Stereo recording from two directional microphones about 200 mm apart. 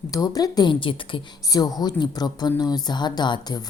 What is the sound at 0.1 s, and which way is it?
Speech, 20° left (ahead or behind).